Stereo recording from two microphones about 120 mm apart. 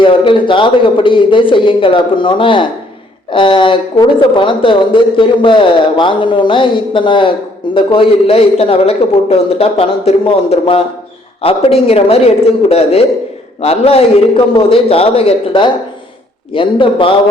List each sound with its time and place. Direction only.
0.0 s a woman's voice: 45° left (ahead or behind)